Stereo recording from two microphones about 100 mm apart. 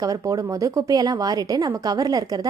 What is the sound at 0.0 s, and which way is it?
Speech, 35° right (ahead or behind).